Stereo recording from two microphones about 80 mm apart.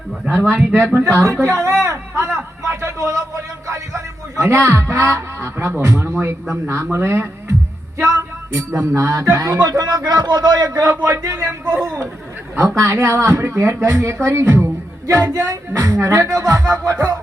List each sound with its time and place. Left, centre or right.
0.4 s speech: right
1.0 s speech: right
1.8 s a sound: right
3.7 s speech: right
8.5 s speech: right
9.0 s speech: right
11.4 s speech: right
12.5 s speech: right
15.0 s speech: right